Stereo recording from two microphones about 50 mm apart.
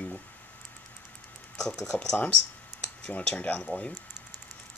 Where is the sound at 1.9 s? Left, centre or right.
Left.